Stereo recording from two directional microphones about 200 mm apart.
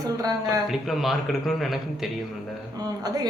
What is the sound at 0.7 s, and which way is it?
Speech, centre (ahead or behind).